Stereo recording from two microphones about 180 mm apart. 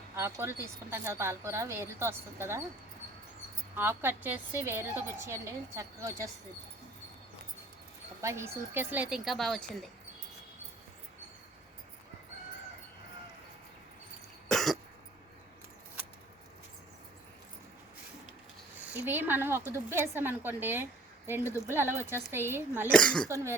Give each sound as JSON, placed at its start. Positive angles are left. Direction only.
{"t": 0.2, "sound": "a woman's voice", "side_deg": -15}
{"t": 3.8, "sound": "a woman's voice", "side_deg": -10}
{"t": 8.2, "sound": "a woman's voice", "side_deg": -15}
{"t": 14.4, "sound": "cough", "side_deg": 0}
{"t": 18.8, "sound": "a woman's voice", "side_deg": -10}
{"t": 22.9, "sound": "speech", "side_deg": 5}
{"t": 23.3, "sound": "a woman's voice", "side_deg": -15}